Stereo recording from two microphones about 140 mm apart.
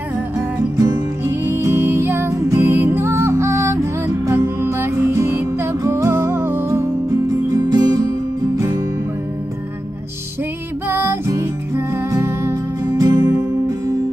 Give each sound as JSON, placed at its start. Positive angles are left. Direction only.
{"t": 0.7, "sound": "music", "side_deg": -25}
{"t": 10.9, "sound": "music", "side_deg": -15}